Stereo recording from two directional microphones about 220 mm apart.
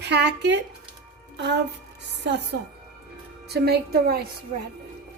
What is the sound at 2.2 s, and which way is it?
Speech, 50° right (ahead or behind).